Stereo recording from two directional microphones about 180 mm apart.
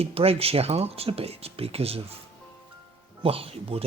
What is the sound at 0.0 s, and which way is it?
Speech, 35° right (ahead or behind).